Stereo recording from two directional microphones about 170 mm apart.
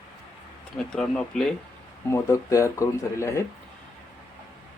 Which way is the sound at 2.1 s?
15° left (ahead or behind).